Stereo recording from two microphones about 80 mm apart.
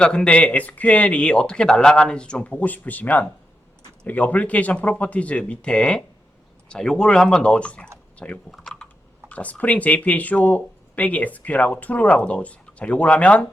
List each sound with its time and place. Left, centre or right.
0.0 s speech: centre
8.4 s typing: centre
9.3 s speech: centre